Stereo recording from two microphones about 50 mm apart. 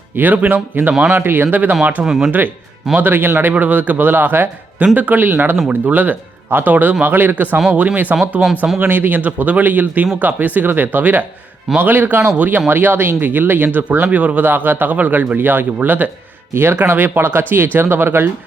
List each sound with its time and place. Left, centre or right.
0.2 s speech: right
1.1 s speech: right
1.8 s speech: right
2.0 s speech: centre
2.9 s speech: right
3.5 s speech: right
7.7 s speech: right
8.4 s speech: centre
8.8 s speech: right
14.4 s speech: right
16.8 s speech: right